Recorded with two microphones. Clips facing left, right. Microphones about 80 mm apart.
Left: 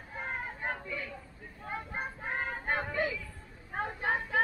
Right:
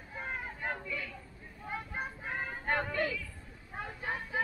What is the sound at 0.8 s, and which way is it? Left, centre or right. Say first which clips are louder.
Speech: left 1 dB; left.